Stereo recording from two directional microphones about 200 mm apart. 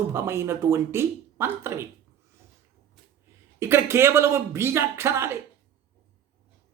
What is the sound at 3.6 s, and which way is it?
Speech, 10° right (ahead or behind).